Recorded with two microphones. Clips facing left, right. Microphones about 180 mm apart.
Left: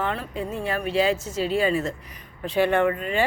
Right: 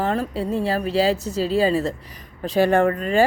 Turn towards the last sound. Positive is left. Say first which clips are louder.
# right 4 dB
turn(degrees=-40)  # may be behind; listen again after turning